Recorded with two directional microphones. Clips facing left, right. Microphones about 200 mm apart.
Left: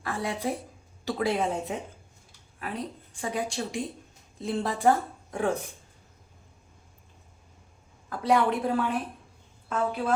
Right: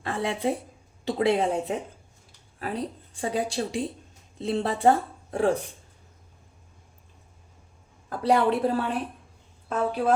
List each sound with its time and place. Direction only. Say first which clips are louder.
0.0 s a woman's voice: right 3 dB; 25° right (ahead or behind)
8.2 s a woman's voice: right 2 dB; 35° right (ahead or behind)